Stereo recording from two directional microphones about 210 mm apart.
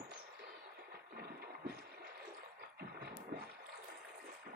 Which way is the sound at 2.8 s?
50° right (ahead or behind).